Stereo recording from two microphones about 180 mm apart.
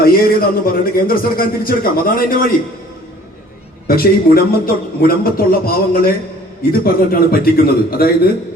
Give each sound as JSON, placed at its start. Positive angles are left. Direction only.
{"t": 0.0, "sound": "a man's voice", "side_deg": 55}
{"t": 3.8, "sound": "a man's voice", "side_deg": 55}